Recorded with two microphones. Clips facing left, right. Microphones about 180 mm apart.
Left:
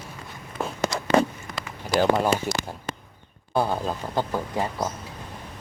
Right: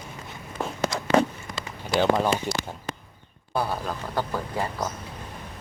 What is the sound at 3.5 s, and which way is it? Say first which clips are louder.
Speech: left 3 dB; 25° left (ahead or behind).